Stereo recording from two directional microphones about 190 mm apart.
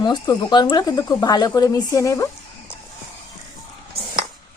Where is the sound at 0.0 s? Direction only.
20° left (ahead or behind).